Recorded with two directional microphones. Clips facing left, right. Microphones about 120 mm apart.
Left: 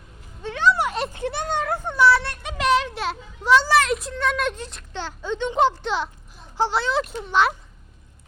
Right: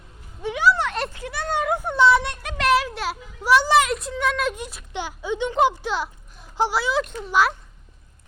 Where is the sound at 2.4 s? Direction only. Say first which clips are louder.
Even; centre (ahead or behind).